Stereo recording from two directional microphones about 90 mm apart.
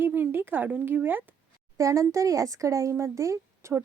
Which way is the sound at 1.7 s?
35° right (ahead or behind).